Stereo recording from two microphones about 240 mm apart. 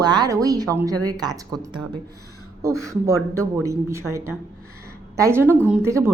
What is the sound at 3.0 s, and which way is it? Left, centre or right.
A woman's voice, centre.